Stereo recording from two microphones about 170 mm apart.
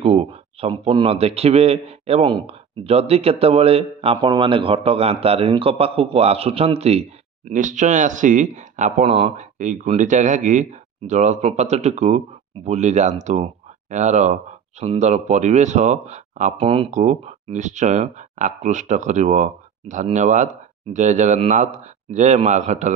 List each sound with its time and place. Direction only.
0.0 s a man's voice: 35° right (ahead or behind)
16.6 s a man's voice: 30° right (ahead or behind)
17.0 s speech: 45° right (ahead or behind)